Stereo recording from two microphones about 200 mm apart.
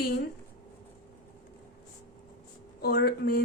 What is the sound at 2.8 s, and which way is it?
Speech, 50° left (ahead or behind).